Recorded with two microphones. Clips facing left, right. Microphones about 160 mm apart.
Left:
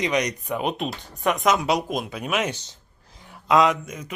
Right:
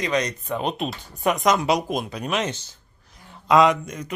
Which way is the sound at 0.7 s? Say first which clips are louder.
Right 1 dB; 5° right (ahead or behind).